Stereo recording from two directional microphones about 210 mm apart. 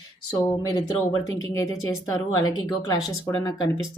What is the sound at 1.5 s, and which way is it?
Speech, 15° left (ahead or behind).